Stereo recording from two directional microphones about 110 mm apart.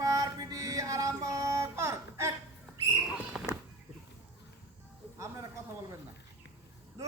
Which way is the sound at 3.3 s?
5° right (ahead or behind).